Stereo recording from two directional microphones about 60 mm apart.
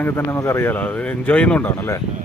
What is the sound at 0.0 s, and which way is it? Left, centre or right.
Speech, left.